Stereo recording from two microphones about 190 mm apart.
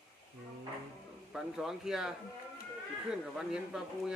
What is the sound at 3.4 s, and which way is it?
Speech, 5° right (ahead or behind).